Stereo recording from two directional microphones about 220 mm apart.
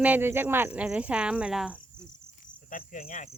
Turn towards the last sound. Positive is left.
turn(degrees=40)  # may be behind; listen again after turning